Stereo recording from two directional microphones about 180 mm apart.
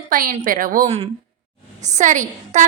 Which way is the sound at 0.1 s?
50° right (ahead or behind).